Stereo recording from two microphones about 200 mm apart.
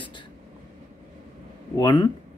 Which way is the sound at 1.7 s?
20° left (ahead or behind).